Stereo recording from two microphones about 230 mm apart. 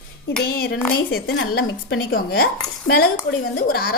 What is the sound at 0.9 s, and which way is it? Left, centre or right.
A woman's voice, left.